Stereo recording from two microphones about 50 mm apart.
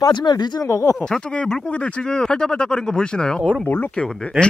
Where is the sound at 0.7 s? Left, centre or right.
Left.